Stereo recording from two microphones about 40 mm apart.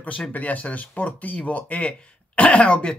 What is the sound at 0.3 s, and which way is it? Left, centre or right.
Speech, left.